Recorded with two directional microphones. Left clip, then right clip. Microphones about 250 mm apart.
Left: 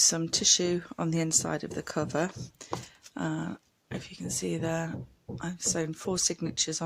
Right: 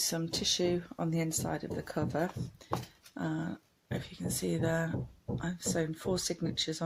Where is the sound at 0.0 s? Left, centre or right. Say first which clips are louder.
Left 7 dB; left.